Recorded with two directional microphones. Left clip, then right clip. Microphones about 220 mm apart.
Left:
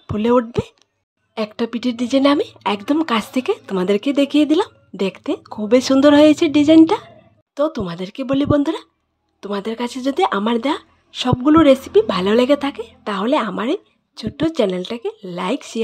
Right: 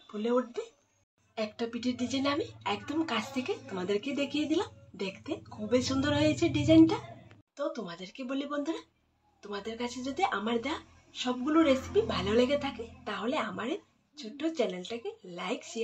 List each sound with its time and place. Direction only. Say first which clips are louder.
0.0 s speech: left 14 dB; 50° left (ahead or behind)